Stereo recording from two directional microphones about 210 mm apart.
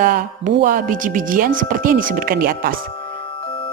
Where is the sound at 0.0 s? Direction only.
45° right (ahead or behind).